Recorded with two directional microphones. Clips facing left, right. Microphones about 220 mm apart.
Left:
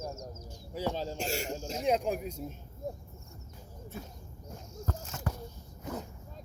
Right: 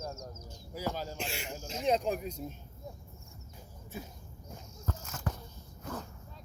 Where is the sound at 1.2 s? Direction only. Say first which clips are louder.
Left 5 dB; 45° left (ahead or behind).